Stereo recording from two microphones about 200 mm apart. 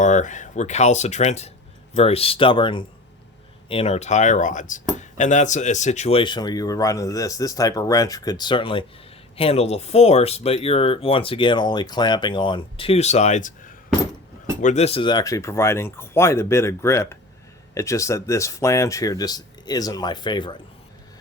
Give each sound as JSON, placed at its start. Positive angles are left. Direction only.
{"t": 0.0, "sound": "speech", "side_deg": 40}